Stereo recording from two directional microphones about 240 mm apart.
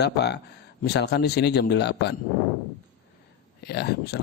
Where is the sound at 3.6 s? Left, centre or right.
Left.